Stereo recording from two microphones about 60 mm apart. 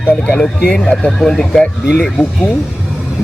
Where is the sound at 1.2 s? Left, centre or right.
Centre.